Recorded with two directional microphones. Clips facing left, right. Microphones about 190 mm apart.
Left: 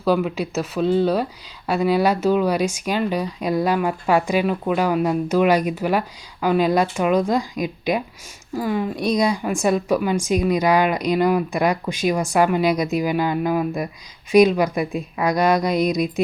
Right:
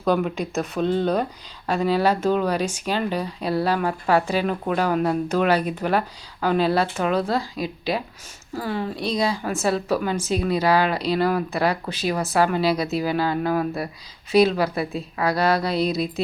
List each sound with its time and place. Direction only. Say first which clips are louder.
0.0 s speech: left 2 dB; 5° left (ahead or behind)